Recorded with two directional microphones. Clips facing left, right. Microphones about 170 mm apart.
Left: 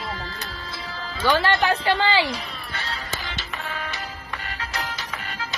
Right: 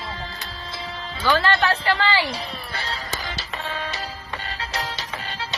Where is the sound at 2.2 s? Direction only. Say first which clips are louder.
Right 1 dB; 35° right (ahead or behind).